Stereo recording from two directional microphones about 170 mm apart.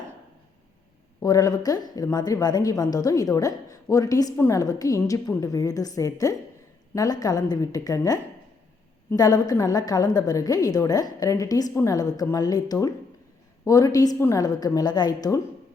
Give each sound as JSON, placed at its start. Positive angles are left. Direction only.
{"t": 1.2, "sound": "a woman's voice", "side_deg": 20}